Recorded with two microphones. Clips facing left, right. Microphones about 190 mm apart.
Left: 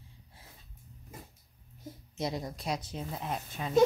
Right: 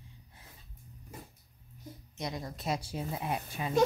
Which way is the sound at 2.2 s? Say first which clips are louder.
Left 4 dB; 25° left (ahead or behind).